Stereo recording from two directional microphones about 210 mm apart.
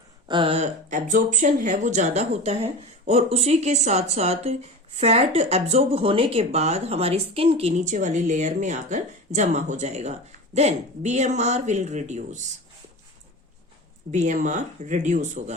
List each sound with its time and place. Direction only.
0.3 s speech: 25° right (ahead or behind)
14.1 s speech: 35° right (ahead or behind)